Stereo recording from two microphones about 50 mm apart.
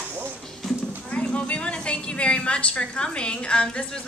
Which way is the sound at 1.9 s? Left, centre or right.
Left.